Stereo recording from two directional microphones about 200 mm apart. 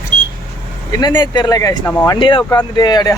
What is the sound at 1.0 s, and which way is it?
Speech, 20° left (ahead or behind).